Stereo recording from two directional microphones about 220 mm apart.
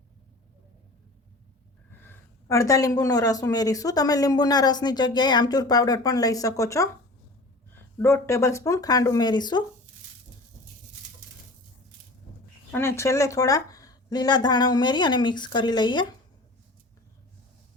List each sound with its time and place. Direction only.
2.5 s speech: 15° left (ahead or behind)
7.9 s speech: 10° left (ahead or behind)
12.7 s a woman's voice: 10° left (ahead or behind)